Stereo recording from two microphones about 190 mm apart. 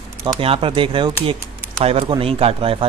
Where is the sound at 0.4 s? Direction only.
30° right (ahead or behind).